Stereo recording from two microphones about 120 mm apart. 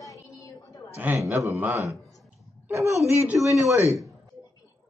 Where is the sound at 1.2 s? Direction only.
25° right (ahead or behind).